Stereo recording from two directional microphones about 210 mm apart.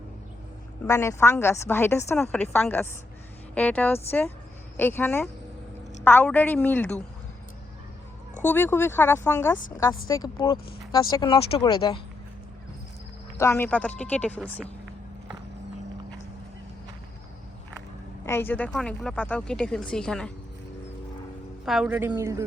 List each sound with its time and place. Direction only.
0.9 s a woman's voice: 15° left (ahead or behind)
8.4 s a woman's voice: 10° left (ahead or behind)
10.1 s speech: 20° left (ahead or behind)
13.4 s a woman's voice: 10° left (ahead or behind)
18.3 s speech: 10° left (ahead or behind)
21.6 s a man's voice: 5° right (ahead or behind)